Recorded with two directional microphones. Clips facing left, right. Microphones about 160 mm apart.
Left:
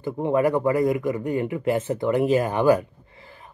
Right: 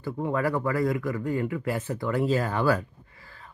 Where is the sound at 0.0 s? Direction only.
20° left (ahead or behind).